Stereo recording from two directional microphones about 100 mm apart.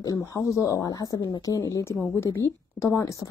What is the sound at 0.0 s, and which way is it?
A woman's voice, 35° left (ahead or behind).